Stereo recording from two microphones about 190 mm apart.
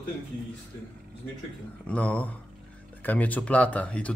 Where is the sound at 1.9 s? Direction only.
5° left (ahead or behind).